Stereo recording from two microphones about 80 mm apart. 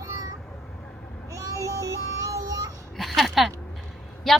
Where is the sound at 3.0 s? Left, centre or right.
Centre.